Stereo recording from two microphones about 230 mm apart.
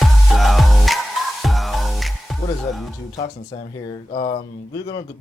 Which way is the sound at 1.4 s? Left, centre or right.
Centre.